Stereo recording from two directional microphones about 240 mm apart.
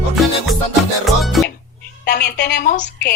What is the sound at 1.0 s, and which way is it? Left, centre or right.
Music, centre.